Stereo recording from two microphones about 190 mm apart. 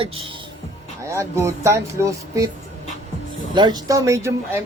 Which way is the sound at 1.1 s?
15° right (ahead or behind).